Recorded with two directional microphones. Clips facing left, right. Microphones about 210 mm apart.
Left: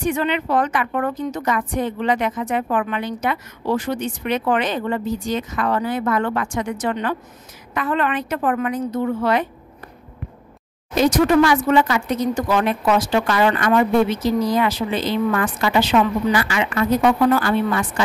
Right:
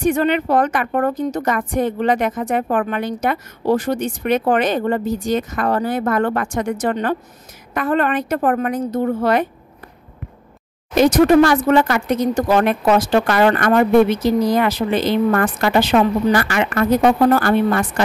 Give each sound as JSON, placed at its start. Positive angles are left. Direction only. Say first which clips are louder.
{"t": 0.0, "sound": "a woman's voice", "louder": "right 4 dB", "side_deg": -45}
{"t": 11.0, "sound": "a woman's voice", "louder": "right 4 dB", "side_deg": -60}
{"t": 11.4, "sound": "a woman's voice", "louder": "right 2 dB", "side_deg": -45}
{"t": 12.4, "sound": "a woman's voice", "louder": "right 4 dB", "side_deg": -40}
{"t": 13.1, "sound": "a woman's voice", "louder": "right 3 dB", "side_deg": -55}